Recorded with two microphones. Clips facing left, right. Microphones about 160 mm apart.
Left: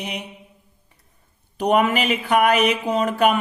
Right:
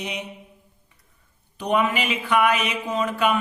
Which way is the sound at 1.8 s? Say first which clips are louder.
Left 4 dB; 40° left (ahead or behind).